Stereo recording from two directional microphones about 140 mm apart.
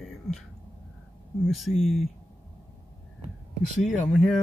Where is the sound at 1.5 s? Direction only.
Centre (ahead or behind).